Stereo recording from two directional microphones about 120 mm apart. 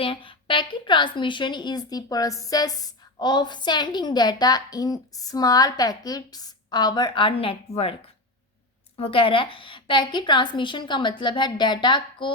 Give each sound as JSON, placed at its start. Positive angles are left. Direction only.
{"t": 0.0, "sound": "a woman's voice", "side_deg": 45}
{"t": 9.0, "sound": "a woman's voice", "side_deg": 50}